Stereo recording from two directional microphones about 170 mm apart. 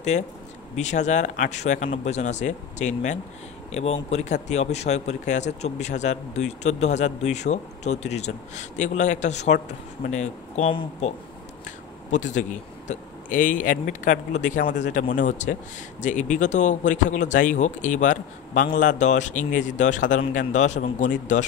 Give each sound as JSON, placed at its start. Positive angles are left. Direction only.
{"t": 0.1, "sound": "speech", "side_deg": 45}
{"t": 12.1, "sound": "speech", "side_deg": 45}